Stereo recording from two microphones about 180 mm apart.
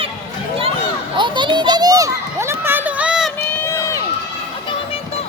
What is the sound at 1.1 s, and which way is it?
Children playing, 25° right (ahead or behind).